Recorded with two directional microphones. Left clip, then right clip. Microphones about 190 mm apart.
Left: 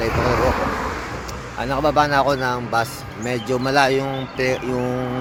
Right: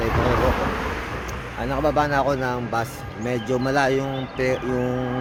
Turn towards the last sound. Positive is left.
turn(degrees=-5)  # may be behind; listen again after turning